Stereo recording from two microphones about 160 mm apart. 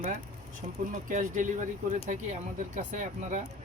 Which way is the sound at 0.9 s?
55° right (ahead or behind).